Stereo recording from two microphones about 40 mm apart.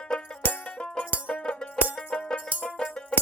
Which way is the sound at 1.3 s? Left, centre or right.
Left.